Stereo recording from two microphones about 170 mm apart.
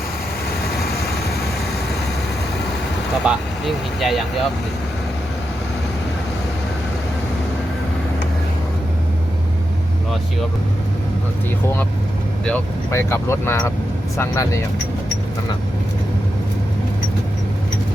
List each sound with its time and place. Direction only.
3.2 s speech: centre (ahead or behind)
12.5 s speech: 10° left (ahead or behind)